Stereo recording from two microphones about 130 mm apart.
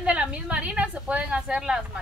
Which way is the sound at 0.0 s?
10° right (ahead or behind).